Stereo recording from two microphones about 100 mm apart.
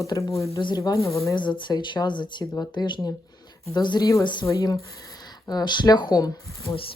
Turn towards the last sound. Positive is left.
turn(degrees=40)  # may be behind; listen again after turning